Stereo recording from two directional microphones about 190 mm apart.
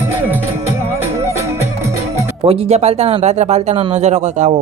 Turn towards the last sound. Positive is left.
turn(degrees=-35)  # may be behind; listen again after turning